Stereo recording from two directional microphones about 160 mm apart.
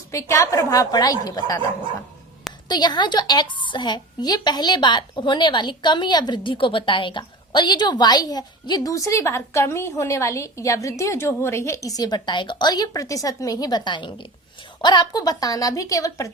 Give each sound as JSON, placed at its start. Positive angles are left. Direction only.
{"t": 0.1, "sound": "a woman's voice", "side_deg": 20}
{"t": 2.6, "sound": "a woman's voice", "side_deg": 25}